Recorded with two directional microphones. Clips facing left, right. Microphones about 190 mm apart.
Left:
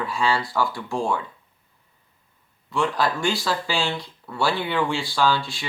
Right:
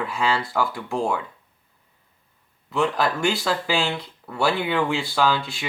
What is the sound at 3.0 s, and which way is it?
Speech, 20° right (ahead or behind).